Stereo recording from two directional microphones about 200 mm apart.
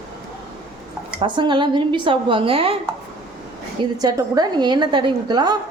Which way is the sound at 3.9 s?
20° right (ahead or behind).